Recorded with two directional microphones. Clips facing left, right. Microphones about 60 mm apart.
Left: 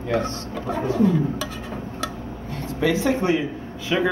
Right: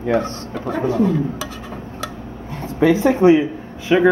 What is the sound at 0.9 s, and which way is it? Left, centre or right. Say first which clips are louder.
Speech: right 1 dB; centre.